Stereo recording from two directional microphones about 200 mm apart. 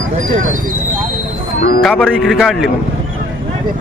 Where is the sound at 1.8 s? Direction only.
Centre (ahead or behind).